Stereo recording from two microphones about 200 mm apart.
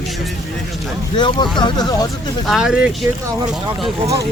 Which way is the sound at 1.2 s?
20° left (ahead or behind).